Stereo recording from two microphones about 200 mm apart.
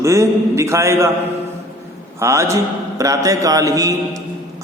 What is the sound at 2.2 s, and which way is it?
Speech, 15° right (ahead or behind).